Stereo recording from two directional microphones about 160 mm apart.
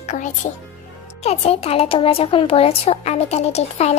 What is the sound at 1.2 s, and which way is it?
Speech, 40° left (ahead or behind).